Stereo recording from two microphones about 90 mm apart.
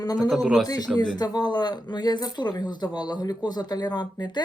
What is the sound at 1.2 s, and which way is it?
Speech, 50° left (ahead or behind).